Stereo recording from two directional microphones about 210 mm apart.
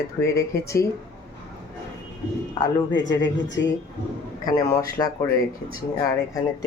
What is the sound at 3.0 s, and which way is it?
Speech, 60° left (ahead or behind).